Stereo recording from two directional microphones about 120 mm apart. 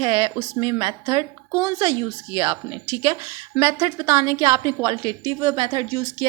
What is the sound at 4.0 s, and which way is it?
A woman's voice, 25° right (ahead or behind).